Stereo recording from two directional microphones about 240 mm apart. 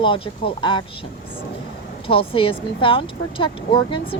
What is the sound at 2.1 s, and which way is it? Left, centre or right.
Speech, left.